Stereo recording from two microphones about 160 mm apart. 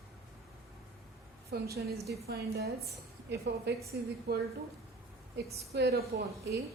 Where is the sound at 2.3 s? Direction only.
85° right.